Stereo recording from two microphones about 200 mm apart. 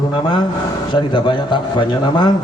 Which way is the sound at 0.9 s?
25° left (ahead or behind).